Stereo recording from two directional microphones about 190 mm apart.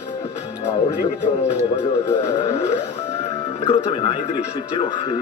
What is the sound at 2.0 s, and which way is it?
Speech, 15° left (ahead or behind).